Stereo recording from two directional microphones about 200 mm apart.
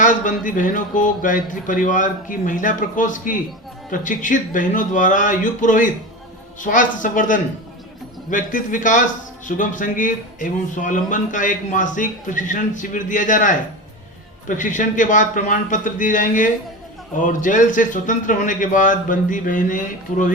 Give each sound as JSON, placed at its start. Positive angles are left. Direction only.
{"t": 0.0, "sound": "speech", "side_deg": 40}